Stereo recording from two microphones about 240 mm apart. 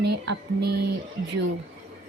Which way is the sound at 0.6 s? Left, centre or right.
Right.